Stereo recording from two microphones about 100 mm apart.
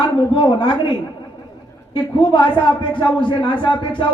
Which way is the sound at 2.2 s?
55° left (ahead or behind).